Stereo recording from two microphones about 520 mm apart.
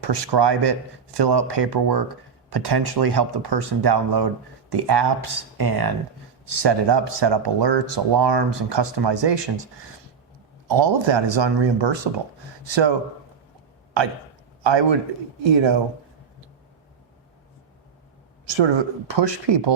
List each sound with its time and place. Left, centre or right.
0.0 s speech: right
10.7 s speech: right
14.6 s a man's voice: right
18.4 s speech: right